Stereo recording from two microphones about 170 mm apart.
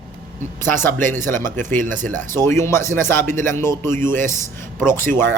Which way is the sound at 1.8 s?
50° right (ahead or behind).